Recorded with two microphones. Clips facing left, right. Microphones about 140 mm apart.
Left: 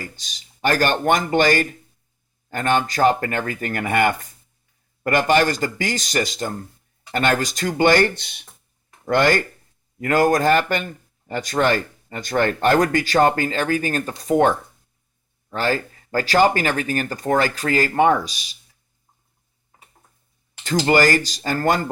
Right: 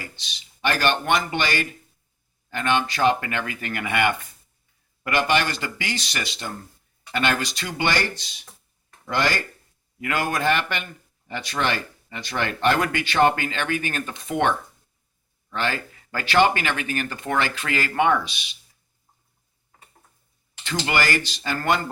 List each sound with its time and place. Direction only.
0.0 s speech: 45° left (ahead or behind)
10.0 s speech: 40° left (ahead or behind)
20.7 s speech: 40° left (ahead or behind)